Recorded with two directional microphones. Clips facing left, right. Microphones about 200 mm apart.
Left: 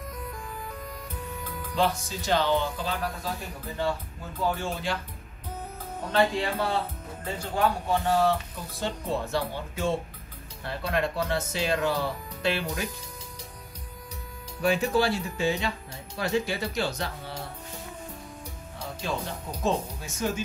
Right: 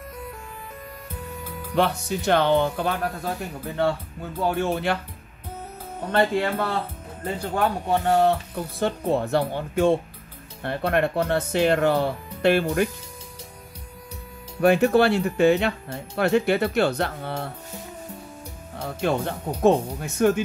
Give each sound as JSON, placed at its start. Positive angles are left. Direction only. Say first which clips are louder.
{"t": 1.8, "sound": "speech", "louder": "right 4 dB", "side_deg": -65}
{"t": 4.6, "sound": "speech", "louder": "right 8 dB", "side_deg": -60}
{"t": 6.1, "sound": "speech", "louder": "right 3 dB", "side_deg": -60}
{"t": 14.6, "sound": "speech", "louder": "right 7 dB", "side_deg": -60}
{"t": 18.8, "sound": "speech", "louder": "right 8 dB", "side_deg": -60}